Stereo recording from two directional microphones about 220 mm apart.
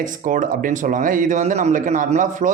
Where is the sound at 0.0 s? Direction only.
35° right (ahead or behind).